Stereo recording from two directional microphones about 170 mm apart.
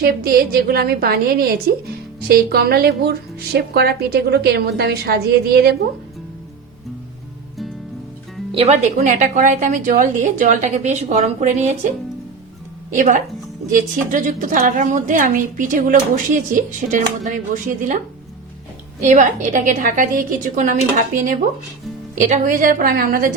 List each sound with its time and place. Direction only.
0.0 s a woman's voice: 65° right (ahead or behind)
8.5 s a woman's voice: 40° right (ahead or behind)
12.9 s a woman's voice: 50° right (ahead or behind)